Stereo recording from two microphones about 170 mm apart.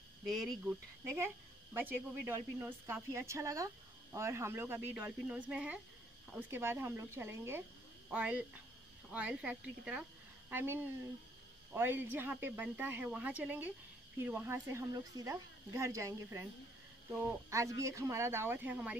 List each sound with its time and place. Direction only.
0.3 s speech: centre (ahead or behind)
0.7 s speech: 15° right (ahead or behind)